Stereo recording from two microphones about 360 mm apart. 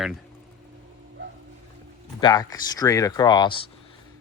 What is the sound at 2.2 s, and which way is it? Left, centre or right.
Speech, centre.